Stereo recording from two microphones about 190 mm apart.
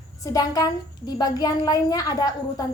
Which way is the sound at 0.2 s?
20° left (ahead or behind).